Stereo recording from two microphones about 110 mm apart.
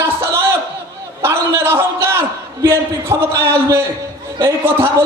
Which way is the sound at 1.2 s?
20° right (ahead or behind).